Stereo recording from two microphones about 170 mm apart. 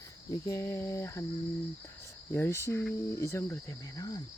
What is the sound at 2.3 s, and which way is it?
Speech, 15° left (ahead or behind).